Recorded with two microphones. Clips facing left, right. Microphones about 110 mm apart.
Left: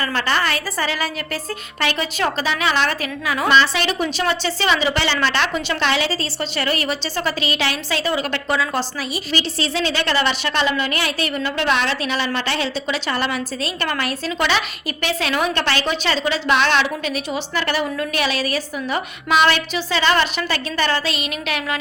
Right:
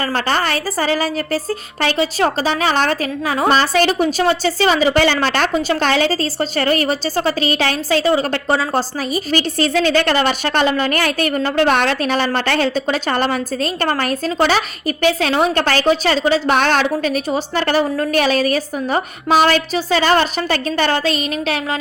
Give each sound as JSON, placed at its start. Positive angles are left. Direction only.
{"t": 0.0, "sound": "a woman's voice", "side_deg": -40}